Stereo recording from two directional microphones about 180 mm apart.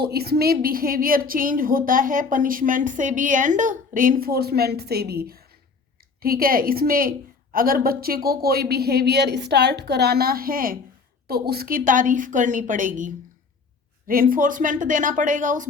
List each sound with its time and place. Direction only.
0.0 s a woman's voice: 60° right (ahead or behind); by 15.7 s 45° right (ahead or behind)